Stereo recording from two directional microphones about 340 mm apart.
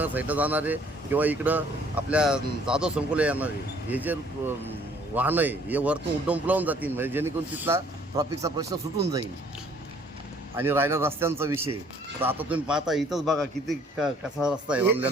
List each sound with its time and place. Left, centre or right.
0.0 s speech: centre
10.6 s a man's voice: centre